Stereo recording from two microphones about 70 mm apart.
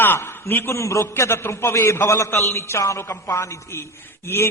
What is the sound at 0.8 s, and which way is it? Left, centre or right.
A man's voice, left.